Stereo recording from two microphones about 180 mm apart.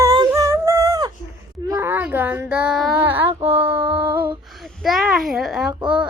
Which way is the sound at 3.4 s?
30° right (ahead or behind).